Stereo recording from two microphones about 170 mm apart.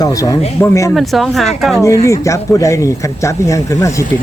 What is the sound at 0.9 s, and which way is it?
Speech, centre (ahead or behind).